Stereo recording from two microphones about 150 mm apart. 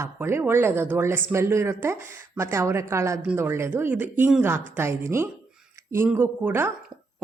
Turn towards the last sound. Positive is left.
turn(degrees=-15)  # may be behind; listen again after turning